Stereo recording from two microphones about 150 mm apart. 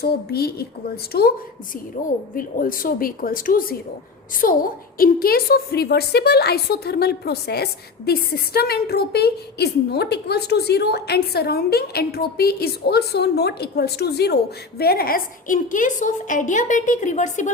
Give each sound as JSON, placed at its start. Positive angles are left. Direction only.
{"t": 0.0, "sound": "a woman's voice", "side_deg": 90}
{"t": 2.3, "sound": "a woman's voice", "side_deg": 70}